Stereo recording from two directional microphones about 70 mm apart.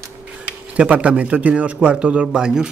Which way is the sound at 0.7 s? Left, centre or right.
Centre.